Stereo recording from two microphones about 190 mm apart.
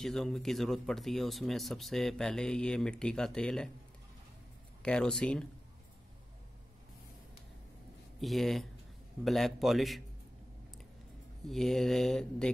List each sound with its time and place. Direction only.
0.0 s speech: centre (ahead or behind)
4.8 s speech: 5° left (ahead or behind)
8.2 s speech: centre (ahead or behind)
11.4 s speech: centre (ahead or behind)